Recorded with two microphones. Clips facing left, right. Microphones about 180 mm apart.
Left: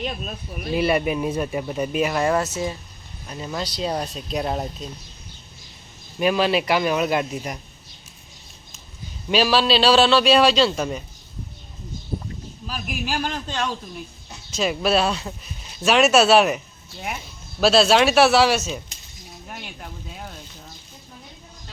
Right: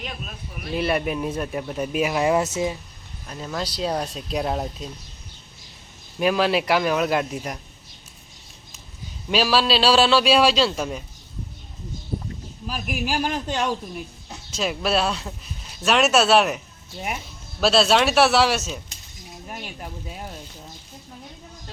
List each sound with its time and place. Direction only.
0.0 s speech: 30° left (ahead or behind)
0.7 s speech: centre (ahead or behind)
2.4 s speech: 20° right (ahead or behind)
3.2 s speech: 5° left (ahead or behind)
6.1 s speech: centre (ahead or behind)
9.3 s speech: centre (ahead or behind)
12.6 s a man's voice: 10° right (ahead or behind)
14.5 s speech: centre (ahead or behind)
17.6 s speech: centre (ahead or behind)